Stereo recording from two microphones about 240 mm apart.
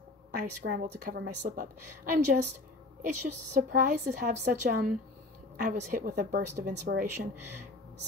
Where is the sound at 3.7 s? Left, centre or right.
Right.